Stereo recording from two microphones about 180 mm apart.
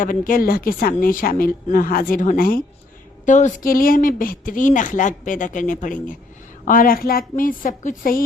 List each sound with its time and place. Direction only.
0.0 s speech: 50° left (ahead or behind)